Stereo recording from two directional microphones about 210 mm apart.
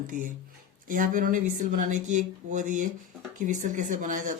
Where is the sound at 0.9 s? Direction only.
40° right (ahead or behind).